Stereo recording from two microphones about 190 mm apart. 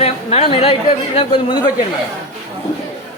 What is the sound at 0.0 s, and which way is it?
Speech, 35° left (ahead or behind).